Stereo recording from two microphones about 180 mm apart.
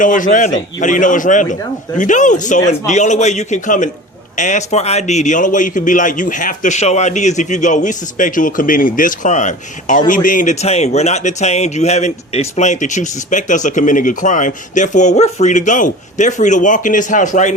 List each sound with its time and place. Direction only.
0.0 s a man's voice: 45° left (ahead or behind)